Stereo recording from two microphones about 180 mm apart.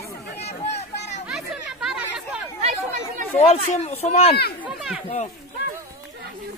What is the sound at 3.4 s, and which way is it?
Speech, 35° left (ahead or behind).